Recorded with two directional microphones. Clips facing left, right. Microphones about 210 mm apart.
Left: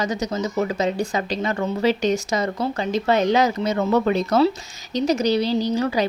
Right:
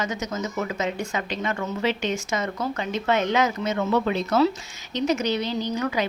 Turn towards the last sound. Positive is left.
turn(degrees=30)  # may be behind; listen again after turning